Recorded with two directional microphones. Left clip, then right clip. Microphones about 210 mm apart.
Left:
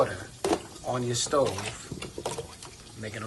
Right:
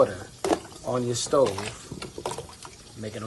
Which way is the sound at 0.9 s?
25° right (ahead or behind).